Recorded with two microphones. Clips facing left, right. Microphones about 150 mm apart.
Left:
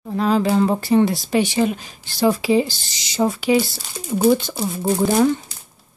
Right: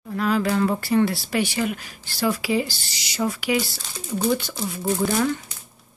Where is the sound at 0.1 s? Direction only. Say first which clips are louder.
Left 4 dB; 25° left (ahead or behind).